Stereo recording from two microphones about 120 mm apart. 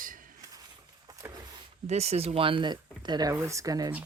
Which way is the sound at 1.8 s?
65° right (ahead or behind).